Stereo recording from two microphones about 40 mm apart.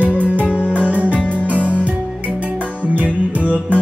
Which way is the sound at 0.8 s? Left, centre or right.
Right.